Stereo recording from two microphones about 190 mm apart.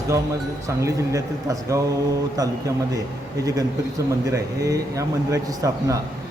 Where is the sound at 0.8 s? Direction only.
15° right (ahead or behind).